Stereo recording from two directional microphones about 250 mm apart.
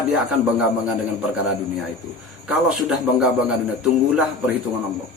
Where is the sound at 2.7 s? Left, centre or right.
Centre.